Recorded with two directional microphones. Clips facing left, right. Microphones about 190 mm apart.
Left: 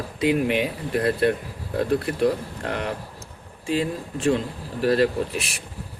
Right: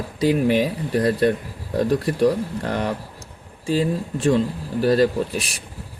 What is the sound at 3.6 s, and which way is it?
Speech, 35° right (ahead or behind).